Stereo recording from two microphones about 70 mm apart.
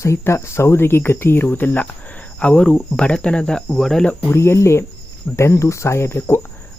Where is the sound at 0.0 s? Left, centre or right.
Left.